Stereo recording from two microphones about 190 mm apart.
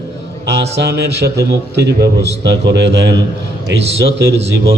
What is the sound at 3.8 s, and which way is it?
Speech, 30° right (ahead or behind).